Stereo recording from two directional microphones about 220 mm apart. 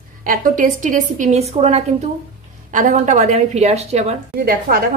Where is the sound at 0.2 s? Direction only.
40° right (ahead or behind).